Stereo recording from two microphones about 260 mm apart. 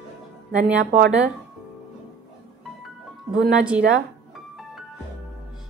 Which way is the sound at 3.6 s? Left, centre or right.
Centre.